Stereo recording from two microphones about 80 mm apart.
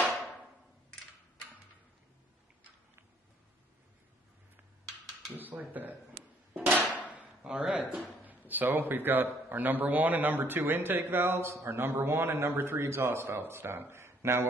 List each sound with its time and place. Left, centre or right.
5.3 s a man's voice: right
6.5 s hammer: centre
7.2 s a sound: centre
8.3 s a man's voice: right